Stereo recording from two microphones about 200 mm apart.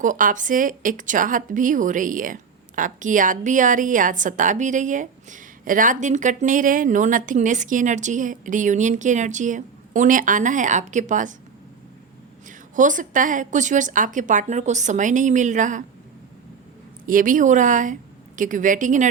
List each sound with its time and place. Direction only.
0.0 s a woman's voice: 40° right (ahead or behind)
12.5 s a woman's voice: 40° right (ahead or behind)
17.1 s a woman's voice: 40° right (ahead or behind)